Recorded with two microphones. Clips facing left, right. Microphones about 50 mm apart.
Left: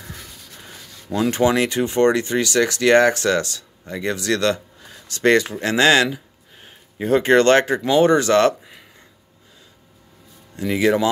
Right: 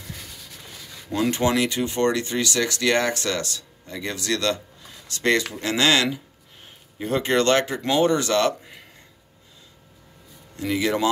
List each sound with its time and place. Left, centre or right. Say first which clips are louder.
1.3 s speech: left 5 dB; left
10.7 s speech: left 5 dB; centre